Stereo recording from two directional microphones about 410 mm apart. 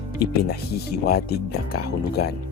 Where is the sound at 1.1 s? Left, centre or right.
Left.